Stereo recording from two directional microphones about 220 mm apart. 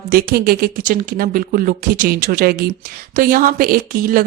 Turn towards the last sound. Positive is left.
turn(degrees=-40)  # may be behind; listen again after turning